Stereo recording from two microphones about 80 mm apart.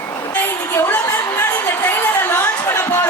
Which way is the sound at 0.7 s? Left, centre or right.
Left.